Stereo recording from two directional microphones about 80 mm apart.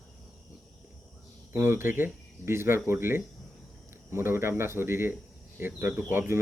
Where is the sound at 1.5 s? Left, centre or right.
Right.